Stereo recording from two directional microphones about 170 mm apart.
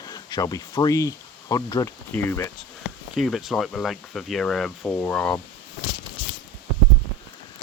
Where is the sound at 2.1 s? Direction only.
10° left (ahead or behind).